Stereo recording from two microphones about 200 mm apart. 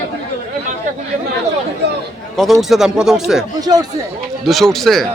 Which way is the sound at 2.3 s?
Centre (ahead or behind).